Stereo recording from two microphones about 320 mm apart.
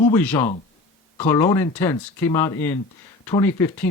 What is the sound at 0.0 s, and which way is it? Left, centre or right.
Speech, centre.